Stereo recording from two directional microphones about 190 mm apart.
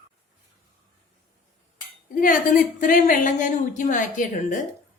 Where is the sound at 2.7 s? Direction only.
45° left (ahead or behind).